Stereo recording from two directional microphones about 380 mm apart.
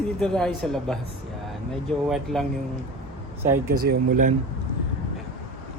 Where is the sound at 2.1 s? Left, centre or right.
Centre.